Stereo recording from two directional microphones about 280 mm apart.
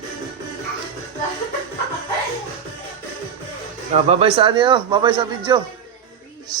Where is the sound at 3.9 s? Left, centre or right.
Right.